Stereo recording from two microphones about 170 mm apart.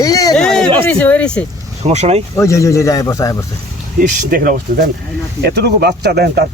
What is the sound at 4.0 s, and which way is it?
Speech, 55° right (ahead or behind).